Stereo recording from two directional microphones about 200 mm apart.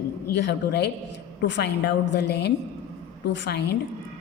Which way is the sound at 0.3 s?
60° left (ahead or behind).